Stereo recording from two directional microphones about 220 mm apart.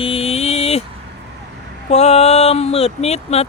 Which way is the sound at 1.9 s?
30° left (ahead or behind).